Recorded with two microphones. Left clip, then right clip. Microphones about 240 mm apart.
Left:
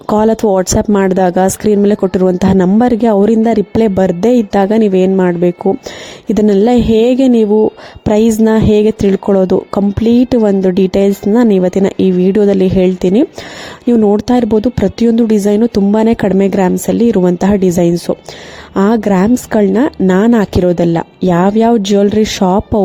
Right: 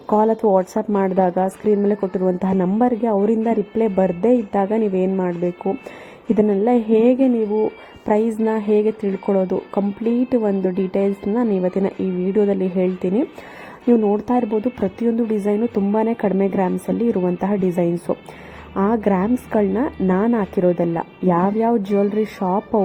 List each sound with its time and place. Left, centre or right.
0.1 s speech: left